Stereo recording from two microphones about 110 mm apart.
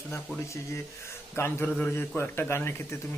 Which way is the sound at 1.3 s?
20° left (ahead or behind).